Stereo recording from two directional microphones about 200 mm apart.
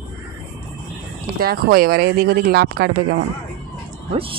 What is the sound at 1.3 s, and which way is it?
Speech, 50° right (ahead or behind).